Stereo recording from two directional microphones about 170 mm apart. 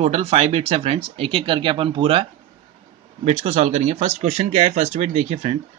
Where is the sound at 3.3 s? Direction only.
40° right (ahead or behind).